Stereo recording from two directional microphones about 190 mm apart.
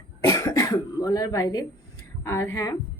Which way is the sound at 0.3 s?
20° left (ahead or behind).